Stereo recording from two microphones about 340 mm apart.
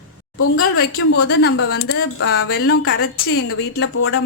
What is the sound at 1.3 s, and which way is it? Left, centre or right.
Speech, left.